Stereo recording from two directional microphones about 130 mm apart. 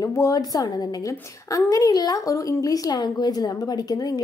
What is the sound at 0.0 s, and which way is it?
Speech, 25° left (ahead or behind).